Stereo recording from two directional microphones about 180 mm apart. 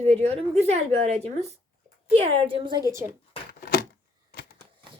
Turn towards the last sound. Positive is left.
turn(degrees=60)  # may be behind; listen again after turning